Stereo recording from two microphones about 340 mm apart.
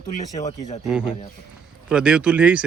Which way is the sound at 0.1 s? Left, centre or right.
Left.